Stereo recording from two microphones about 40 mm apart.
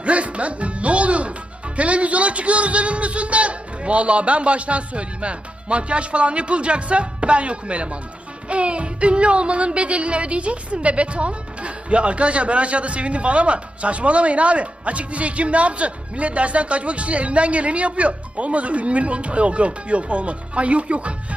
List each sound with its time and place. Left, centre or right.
0.0 s speech: right
1.7 s music: right